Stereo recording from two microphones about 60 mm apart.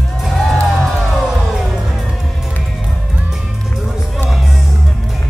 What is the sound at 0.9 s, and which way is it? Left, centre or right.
Music, centre.